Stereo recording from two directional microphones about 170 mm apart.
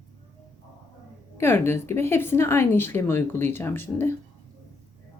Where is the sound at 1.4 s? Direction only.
15° left (ahead or behind).